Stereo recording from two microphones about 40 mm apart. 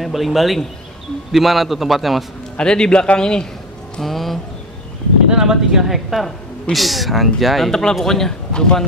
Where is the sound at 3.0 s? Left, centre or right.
Left.